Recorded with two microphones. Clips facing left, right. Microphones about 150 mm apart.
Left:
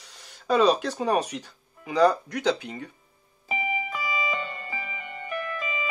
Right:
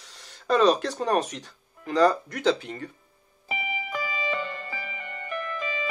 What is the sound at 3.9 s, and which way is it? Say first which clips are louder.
Music: even; centre (ahead or behind).